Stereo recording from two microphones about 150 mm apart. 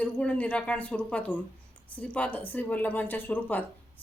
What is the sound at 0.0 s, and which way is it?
A woman's voice, 10° left (ahead or behind).